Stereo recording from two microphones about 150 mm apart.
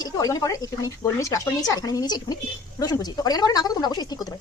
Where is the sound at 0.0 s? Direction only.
25° left (ahead or behind).